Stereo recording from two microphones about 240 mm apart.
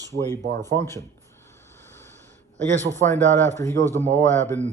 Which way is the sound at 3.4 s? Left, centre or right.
Centre.